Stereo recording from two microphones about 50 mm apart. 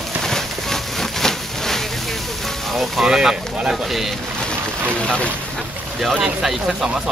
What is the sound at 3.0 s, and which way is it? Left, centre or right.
Speech, centre.